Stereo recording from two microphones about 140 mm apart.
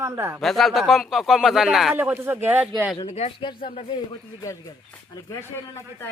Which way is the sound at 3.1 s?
50° left (ahead or behind).